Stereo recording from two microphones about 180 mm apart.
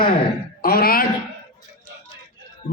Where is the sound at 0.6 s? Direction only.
55° left (ahead or behind).